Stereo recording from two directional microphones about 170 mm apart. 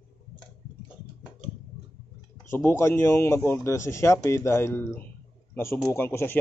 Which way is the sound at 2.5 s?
15° left (ahead or behind).